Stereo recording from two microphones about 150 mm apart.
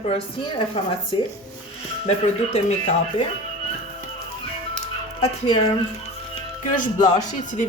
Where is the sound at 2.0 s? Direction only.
45° left (ahead or behind).